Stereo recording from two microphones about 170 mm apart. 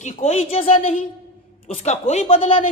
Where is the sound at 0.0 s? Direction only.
45° left (ahead or behind).